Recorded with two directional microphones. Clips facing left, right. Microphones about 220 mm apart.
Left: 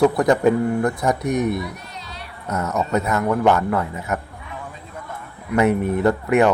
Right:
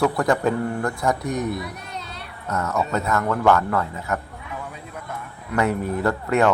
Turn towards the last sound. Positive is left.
turn(degrees=15)  # may be behind; listen again after turning